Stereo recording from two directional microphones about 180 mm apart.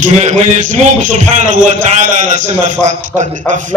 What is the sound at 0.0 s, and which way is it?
A man's voice, 40° right (ahead or behind).